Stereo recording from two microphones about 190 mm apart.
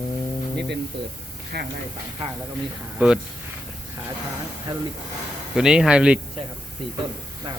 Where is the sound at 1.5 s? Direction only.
55° right (ahead or behind).